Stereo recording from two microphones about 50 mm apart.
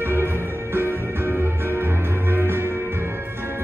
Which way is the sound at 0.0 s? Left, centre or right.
Right.